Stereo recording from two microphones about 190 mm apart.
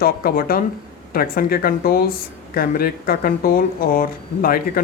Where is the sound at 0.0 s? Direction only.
50° left (ahead or behind).